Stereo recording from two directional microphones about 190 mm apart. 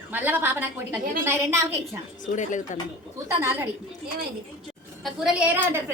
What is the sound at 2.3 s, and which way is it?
Speech, 40° left (ahead or behind).